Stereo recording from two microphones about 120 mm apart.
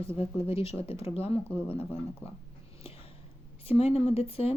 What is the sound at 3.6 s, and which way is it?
Speech, 55° left (ahead or behind).